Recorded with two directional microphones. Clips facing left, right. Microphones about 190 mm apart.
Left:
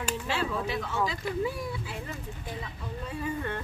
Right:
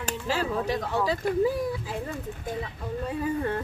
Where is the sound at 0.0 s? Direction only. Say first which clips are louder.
Right 2 dB; 40° right (ahead or behind).